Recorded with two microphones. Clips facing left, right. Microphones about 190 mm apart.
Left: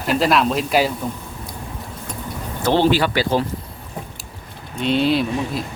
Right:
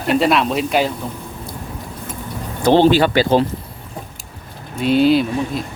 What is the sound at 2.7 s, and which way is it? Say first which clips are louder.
Speech: right 5 dB; 20° right (ahead or behind).